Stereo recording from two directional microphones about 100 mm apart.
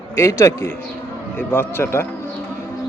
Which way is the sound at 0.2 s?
30° left (ahead or behind).